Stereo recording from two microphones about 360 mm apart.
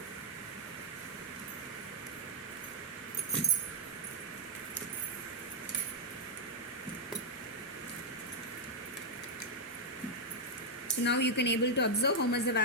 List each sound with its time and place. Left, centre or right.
10.8 s a woman's voice: left